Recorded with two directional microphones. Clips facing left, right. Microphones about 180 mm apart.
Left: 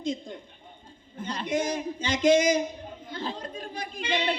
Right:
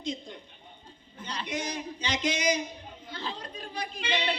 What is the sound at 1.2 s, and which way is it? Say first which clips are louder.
Speech: left 6 dB; 50° left (ahead or behind).